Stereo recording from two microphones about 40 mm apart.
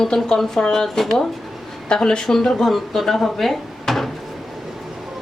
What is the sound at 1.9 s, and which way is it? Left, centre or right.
A woman's voice, centre.